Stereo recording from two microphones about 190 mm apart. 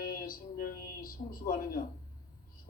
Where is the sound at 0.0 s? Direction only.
50° left (ahead or behind).